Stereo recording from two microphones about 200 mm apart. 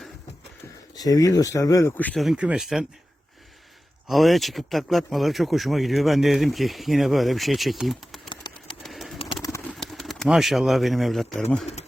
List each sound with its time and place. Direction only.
0.9 s speech: 20° left (ahead or behind); by 2.8 s centre (ahead or behind)
4.1 s speech: centre (ahead or behind)
8.3 s a sound: 25° left (ahead or behind)
8.8 s bird: centre (ahead or behind)
9.1 s bird: 25° left (ahead or behind)
9.7 s speech: centre (ahead or behind)